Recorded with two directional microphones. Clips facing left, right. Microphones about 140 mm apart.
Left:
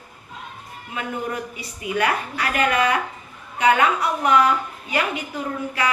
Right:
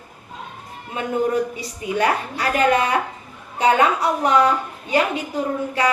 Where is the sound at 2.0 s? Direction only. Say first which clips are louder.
Right 3 dB; 30° right (ahead or behind).